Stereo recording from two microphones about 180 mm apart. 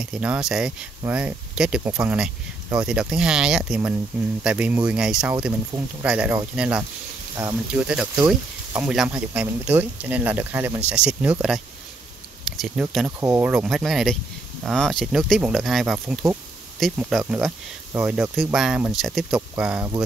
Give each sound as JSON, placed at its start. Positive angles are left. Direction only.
{"t": 0.0, "sound": "speech", "side_deg": -5}
{"t": 5.7, "sound": "speech", "side_deg": -20}
{"t": 6.0, "sound": "speech", "side_deg": -10}